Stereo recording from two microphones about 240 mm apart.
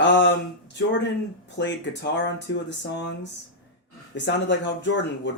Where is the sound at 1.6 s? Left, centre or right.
Left.